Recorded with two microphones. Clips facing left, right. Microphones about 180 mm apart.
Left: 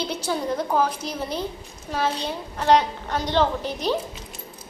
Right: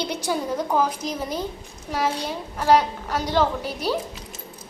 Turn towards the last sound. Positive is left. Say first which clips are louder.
# left 1 dB
turn(degrees=-10)  # may be behind; listen again after turning